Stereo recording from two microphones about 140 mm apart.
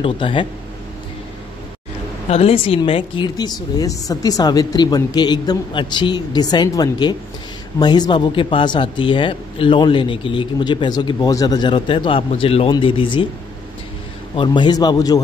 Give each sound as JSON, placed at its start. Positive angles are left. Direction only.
{"t": 0.0, "sound": "a man's voice", "side_deg": 35}
{"t": 2.2, "sound": "a man's voice", "side_deg": 45}
{"t": 14.3, "sound": "a man's voice", "side_deg": 35}